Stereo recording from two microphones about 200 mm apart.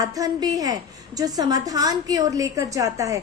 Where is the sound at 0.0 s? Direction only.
15° right (ahead or behind).